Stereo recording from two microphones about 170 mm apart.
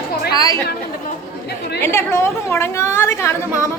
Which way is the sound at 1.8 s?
15° left (ahead or behind).